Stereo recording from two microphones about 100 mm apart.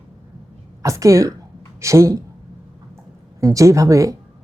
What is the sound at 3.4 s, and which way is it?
Speech, 35° right (ahead or behind).